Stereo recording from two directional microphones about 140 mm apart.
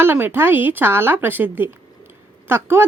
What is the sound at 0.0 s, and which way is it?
Speech, 15° right (ahead or behind).